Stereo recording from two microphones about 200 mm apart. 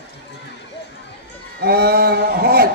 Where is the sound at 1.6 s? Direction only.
50° right (ahead or behind).